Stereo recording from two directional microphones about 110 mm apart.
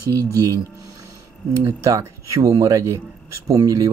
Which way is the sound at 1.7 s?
30° right (ahead or behind).